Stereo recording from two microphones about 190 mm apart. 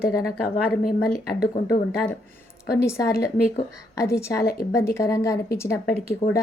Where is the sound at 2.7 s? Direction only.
15° left (ahead or behind).